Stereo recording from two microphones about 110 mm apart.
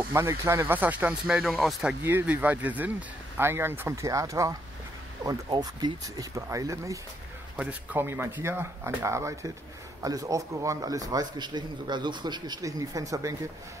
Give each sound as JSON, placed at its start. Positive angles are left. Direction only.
{"t": 0.1, "sound": "speech", "side_deg": -25}
{"t": 1.2, "sound": "speech", "side_deg": -5}
{"t": 2.0, "sound": "a man's voice", "side_deg": -20}
{"t": 7.5, "sound": "a man's voice", "side_deg": -15}